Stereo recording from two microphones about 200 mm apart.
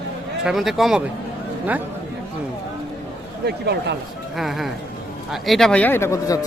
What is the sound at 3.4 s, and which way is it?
Speech, 55° right (ahead or behind).